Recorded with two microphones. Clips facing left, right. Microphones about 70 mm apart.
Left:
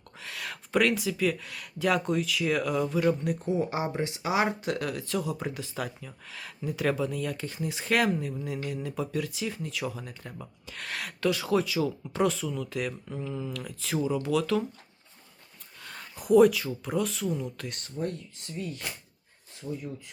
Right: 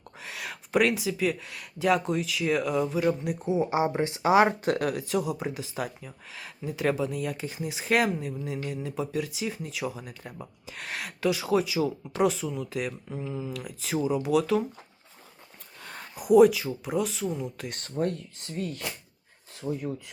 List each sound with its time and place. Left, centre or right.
0.2 s speech: centre
10.8 s speech: centre
15.8 s a sound: right
16.1 s speech: centre
18.0 s speech: right
19.6 s speech: right